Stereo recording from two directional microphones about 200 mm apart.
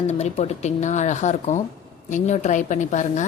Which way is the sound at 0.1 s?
35° left (ahead or behind).